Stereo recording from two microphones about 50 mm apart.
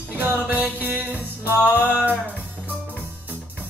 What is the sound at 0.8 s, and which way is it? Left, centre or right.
Music, right.